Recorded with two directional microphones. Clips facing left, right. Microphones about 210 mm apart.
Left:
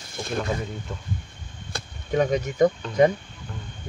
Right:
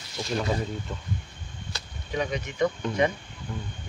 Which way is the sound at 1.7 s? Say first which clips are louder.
Left 7 dB; 45° left (ahead or behind).